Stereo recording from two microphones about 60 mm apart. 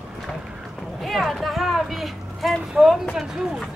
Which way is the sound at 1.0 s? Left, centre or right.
Centre.